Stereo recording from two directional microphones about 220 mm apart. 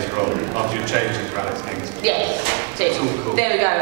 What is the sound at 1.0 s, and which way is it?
Speech, 10° right (ahead or behind).